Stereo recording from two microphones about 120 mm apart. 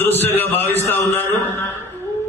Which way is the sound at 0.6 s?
20° left (ahead or behind).